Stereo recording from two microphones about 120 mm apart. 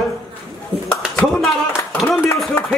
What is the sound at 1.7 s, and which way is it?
Clapping, 20° left (ahead or behind).